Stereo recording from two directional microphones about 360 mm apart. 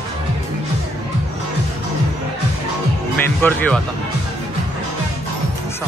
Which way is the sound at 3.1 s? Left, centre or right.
Centre.